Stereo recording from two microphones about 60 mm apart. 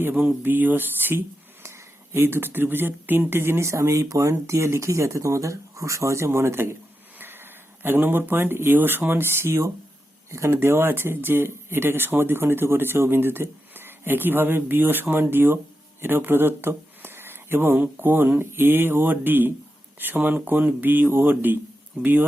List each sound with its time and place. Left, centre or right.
0.4 s speech: right
1.6 s speech: right
22.0 s speech: centre